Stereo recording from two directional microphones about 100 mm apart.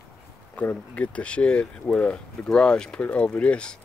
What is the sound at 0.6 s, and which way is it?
Speech, 15° left (ahead or behind).